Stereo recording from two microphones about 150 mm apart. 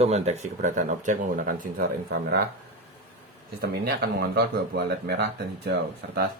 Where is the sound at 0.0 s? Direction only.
45° right (ahead or behind); by 2.4 s 90° right.